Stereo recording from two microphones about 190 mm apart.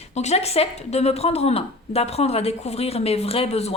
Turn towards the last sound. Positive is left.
turn(degrees=35)  # may be behind; listen again after turning